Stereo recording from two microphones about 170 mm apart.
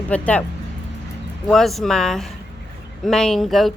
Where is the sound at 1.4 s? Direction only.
Centre (ahead or behind).